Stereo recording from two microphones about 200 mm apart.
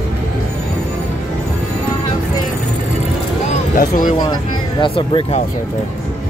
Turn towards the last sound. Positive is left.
turn(degrees=30)  # may be behind; listen again after turning